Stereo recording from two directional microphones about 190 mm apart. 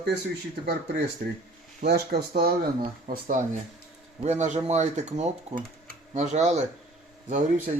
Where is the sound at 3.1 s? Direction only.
40° right (ahead or behind).